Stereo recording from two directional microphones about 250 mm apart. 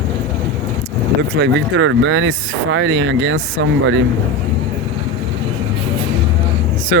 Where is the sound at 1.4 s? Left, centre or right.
Right.